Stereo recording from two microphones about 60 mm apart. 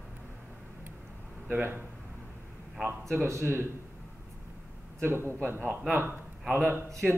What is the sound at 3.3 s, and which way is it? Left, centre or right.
Speech, right.